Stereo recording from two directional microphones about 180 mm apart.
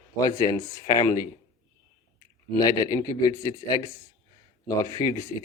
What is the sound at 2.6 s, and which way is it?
Speech, 20° left (ahead or behind).